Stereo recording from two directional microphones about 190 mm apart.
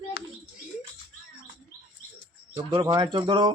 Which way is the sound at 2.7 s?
25° right (ahead or behind).